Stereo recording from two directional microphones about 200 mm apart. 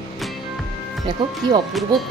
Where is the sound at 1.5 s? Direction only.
20° right (ahead or behind).